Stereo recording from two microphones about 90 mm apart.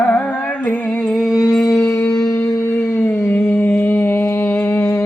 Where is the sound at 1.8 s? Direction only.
15° left (ahead or behind).